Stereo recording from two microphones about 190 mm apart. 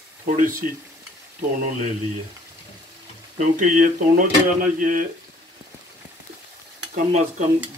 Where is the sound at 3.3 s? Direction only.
45° right (ahead or behind).